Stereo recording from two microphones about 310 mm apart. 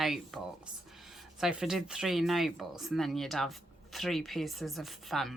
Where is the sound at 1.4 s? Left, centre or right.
Centre.